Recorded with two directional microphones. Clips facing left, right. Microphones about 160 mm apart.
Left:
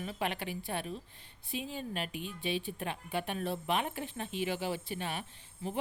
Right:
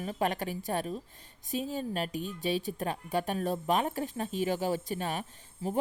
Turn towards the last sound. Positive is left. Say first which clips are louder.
# right 5 dB
turn(degrees=-45)  # may be behind; listen again after turning